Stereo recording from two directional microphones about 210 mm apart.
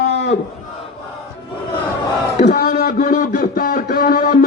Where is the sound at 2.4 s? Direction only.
50° left (ahead or behind).